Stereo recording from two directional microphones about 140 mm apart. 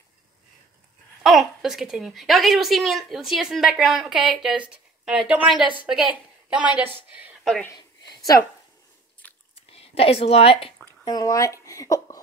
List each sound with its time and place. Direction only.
1.2 s speech: centre (ahead or behind)
7.7 s a sound: 30° left (ahead or behind)
9.2 s biting: 10° left (ahead or behind)
9.6 s speech: 45° left (ahead or behind)
11.1 s speech: 25° left (ahead or behind)